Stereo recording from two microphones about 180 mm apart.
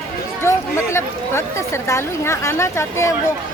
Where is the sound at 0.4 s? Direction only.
15° left (ahead or behind).